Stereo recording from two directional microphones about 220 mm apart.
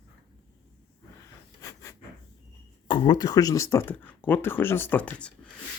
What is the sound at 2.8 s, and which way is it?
Speech, 20° left (ahead or behind).